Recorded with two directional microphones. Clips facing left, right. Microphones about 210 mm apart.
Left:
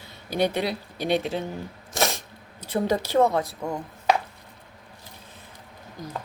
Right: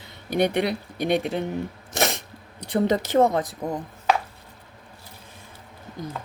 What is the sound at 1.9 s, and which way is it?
Sneeze, 20° right (ahead or behind).